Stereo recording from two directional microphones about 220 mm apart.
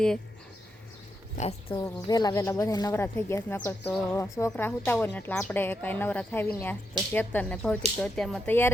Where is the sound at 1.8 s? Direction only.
15° left (ahead or behind).